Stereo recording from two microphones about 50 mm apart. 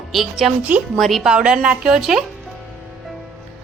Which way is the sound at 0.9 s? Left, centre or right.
Centre.